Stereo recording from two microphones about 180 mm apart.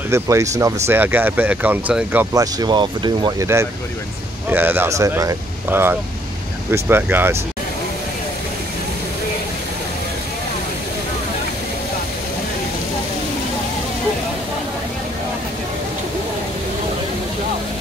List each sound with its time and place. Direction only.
0.1 s speech: 15° right (ahead or behind)
2.3 s speech: 20° right (ahead or behind)